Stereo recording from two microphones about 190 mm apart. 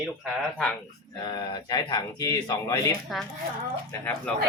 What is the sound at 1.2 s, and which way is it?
Speech, 25° left (ahead or behind).